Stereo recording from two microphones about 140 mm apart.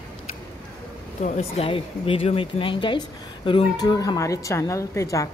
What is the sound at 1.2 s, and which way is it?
A woman's voice, 50° left (ahead or behind).